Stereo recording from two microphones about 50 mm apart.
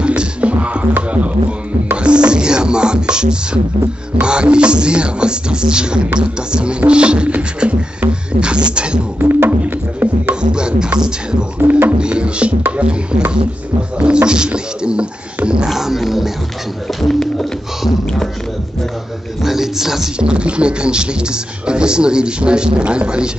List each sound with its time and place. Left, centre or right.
0.0 s music: right
2.0 s music: right
4.2 s speech: centre
9.2 s music: right
10.5 s music: centre
11.6 s speech: right
15.7 s music: centre
17.0 s a sound: centre
19.4 s a man's voice: centre
20.2 s speech: centre